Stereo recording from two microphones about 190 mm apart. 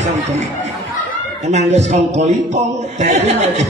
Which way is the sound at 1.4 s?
35° right (ahead or behind).